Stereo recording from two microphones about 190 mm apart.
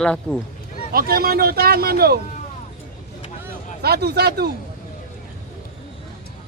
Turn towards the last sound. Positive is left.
turn(degrees=-55)  # may be behind; listen again after turning